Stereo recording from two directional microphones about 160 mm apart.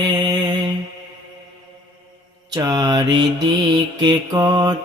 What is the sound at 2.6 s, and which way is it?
Mantra, 25° right (ahead or behind).